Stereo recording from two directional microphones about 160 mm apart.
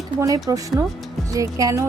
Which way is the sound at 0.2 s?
20° right (ahead or behind).